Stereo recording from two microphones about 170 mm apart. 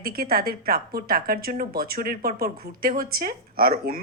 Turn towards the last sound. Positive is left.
turn(degrees=-60)  # may be behind; listen again after turning